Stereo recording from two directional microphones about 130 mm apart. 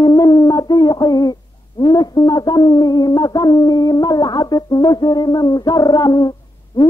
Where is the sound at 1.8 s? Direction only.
30° left (ahead or behind).